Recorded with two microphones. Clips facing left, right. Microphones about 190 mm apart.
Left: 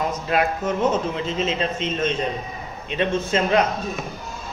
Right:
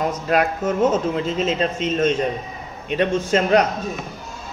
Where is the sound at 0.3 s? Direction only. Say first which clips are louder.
Right 2 dB; 45° right (ahead or behind).